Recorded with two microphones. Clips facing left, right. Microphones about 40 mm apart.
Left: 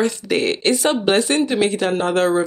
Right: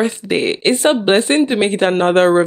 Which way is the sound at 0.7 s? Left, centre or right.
Right.